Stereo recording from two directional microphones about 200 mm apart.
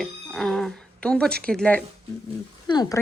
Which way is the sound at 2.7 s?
20° left (ahead or behind).